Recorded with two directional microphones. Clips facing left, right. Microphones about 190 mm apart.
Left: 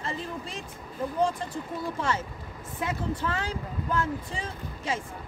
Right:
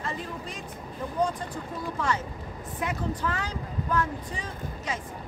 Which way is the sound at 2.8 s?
25° left (ahead or behind).